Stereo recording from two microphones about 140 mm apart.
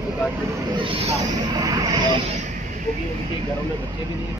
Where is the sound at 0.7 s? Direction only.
40° right (ahead or behind).